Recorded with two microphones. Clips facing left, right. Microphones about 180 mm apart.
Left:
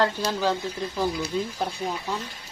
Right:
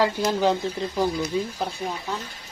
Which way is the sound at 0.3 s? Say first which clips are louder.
Right 4 dB; 20° right (ahead or behind).